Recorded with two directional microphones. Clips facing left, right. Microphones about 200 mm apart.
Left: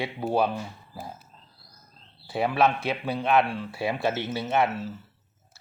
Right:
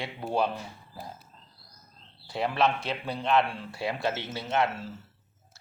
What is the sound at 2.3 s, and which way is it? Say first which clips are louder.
Speech: left 3 dB; 5° left (ahead or behind).